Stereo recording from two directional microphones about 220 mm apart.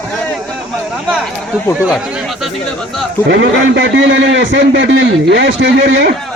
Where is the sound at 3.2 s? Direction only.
55° right (ahead or behind).